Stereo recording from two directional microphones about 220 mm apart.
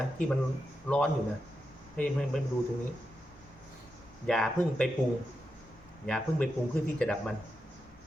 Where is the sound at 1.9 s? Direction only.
5° left (ahead or behind).